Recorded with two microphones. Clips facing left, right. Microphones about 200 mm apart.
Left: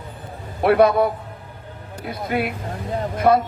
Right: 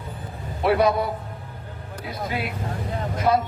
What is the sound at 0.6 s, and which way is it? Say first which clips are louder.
Speech: left 5 dB; 55° left (ahead or behind).